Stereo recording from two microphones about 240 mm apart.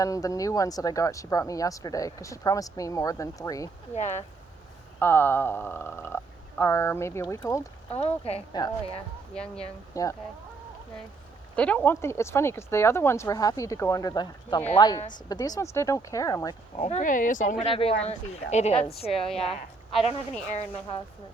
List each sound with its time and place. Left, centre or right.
0.0 s speech: centre
3.9 s speech: left
4.9 s speech: centre
7.9 s speech: left
11.5 s speech: centre
16.8 s speech: left
19.1 s a woman's voice: centre